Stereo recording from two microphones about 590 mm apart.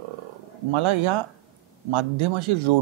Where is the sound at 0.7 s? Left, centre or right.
Right.